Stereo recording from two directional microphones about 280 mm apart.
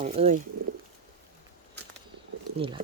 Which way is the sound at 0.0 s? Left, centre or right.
Right.